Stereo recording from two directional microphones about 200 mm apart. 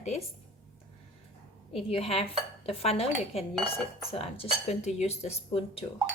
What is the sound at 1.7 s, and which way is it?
Dishes, 30° left (ahead or behind).